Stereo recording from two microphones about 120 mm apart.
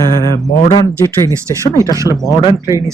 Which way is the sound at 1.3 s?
25° right (ahead or behind).